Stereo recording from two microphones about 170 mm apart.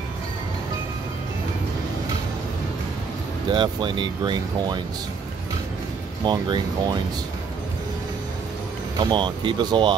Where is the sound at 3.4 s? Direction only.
25° right (ahead or behind).